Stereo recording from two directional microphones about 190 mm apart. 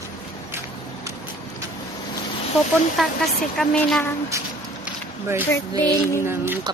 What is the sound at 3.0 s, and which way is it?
A woman's voice, centre (ahead or behind).